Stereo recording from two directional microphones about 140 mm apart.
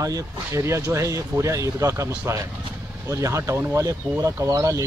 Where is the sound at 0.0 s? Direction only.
20° right (ahead or behind).